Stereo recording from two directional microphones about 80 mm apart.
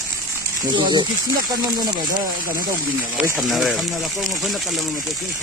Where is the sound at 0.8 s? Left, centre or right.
Right.